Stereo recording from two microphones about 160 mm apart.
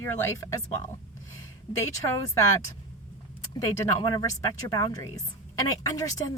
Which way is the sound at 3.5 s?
25° left (ahead or behind).